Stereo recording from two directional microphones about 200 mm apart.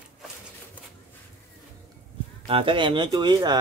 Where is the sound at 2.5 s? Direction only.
25° right (ahead or behind).